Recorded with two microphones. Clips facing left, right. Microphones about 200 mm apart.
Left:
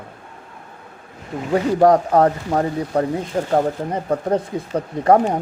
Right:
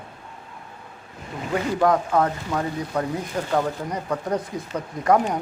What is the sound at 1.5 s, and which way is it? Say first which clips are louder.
Speech: left 6 dB; 35° left (ahead or behind).